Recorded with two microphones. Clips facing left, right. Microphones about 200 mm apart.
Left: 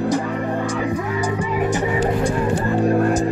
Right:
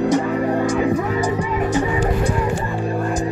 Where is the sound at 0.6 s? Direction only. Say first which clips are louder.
Right 4 dB; 20° right (ahead or behind).